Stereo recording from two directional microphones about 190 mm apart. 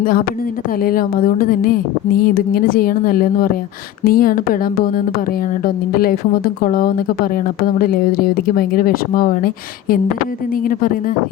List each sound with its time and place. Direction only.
0.0 s speech: 50° left (ahead or behind)
10.6 s speech: 50° left (ahead or behind)